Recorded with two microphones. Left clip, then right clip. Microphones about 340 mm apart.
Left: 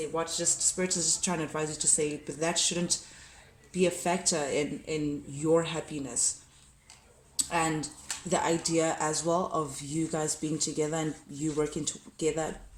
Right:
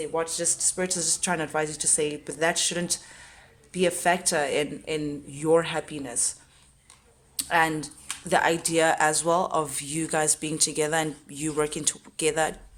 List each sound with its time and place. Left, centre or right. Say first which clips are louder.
0.2 s speech: right 2 dB; centre
7.3 s speech: right 6 dB; right